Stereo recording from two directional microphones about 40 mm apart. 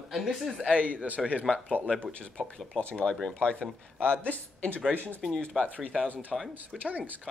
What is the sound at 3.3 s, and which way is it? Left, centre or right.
Speech, left.